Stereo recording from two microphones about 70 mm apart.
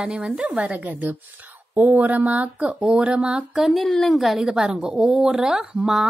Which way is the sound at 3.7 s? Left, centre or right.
Centre.